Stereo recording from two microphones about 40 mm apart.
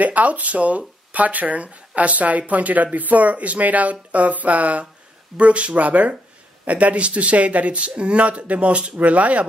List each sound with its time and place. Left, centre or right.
0.0 s speech: right